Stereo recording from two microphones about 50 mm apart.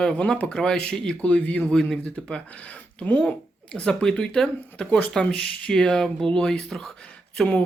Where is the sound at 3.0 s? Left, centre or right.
Left.